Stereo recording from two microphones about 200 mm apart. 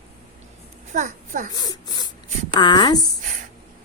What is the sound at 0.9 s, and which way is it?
Speech, 35° right (ahead or behind).